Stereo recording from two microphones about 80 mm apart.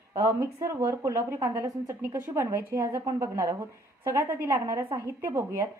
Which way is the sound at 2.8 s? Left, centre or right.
Right.